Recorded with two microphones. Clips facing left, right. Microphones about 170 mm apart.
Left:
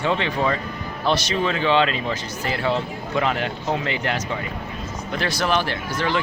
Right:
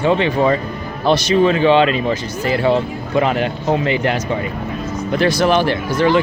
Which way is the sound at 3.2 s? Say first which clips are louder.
Right 6 dB; 15° right (ahead or behind).